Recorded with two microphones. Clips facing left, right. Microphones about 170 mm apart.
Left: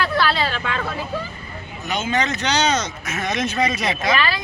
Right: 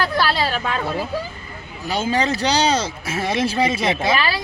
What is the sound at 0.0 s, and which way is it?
Speech, 40° right (ahead or behind).